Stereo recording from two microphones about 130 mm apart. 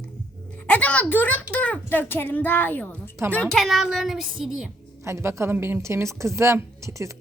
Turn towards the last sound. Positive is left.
turn(degrees=-25)  # may be behind; listen again after turning